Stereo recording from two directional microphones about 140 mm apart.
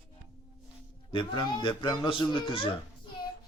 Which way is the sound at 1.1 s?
35° left (ahead or behind).